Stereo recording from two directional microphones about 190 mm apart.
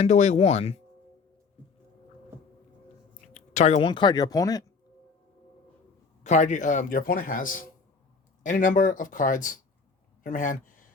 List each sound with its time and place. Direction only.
0.0 s speech: 35° left (ahead or behind)
3.2 s speech: 40° left (ahead or behind); by 4.6 s 20° left (ahead or behind)
6.2 s speech: 40° left (ahead or behind)